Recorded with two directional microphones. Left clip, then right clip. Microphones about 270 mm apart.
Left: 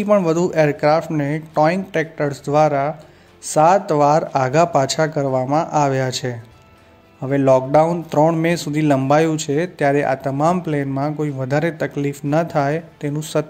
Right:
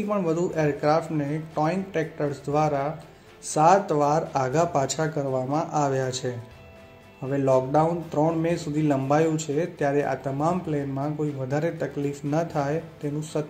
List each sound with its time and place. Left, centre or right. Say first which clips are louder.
0.1 s speech: left 10 dB; left